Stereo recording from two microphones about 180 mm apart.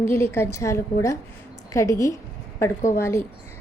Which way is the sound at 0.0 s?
10° left (ahead or behind).